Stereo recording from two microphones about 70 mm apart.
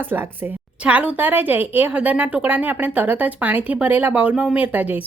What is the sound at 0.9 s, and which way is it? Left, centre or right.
A woman's voice, centre.